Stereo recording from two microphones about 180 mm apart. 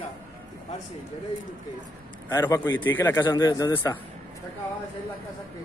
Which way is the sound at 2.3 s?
15° left (ahead or behind).